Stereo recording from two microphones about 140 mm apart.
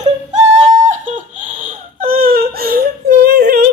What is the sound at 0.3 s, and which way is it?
Crying, 55° right (ahead or behind).